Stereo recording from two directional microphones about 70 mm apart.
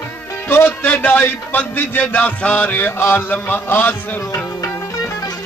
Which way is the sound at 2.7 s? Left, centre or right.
Left.